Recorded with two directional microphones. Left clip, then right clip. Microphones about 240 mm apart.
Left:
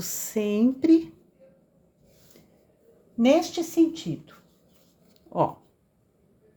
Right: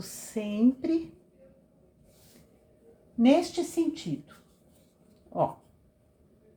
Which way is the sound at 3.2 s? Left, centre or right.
Left.